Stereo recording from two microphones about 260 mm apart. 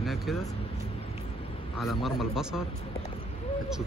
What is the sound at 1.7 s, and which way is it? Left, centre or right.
Speech, centre.